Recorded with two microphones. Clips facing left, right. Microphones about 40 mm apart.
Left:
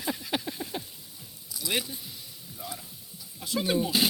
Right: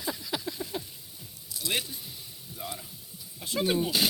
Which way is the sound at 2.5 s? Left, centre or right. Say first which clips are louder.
Right 1 dB; centre.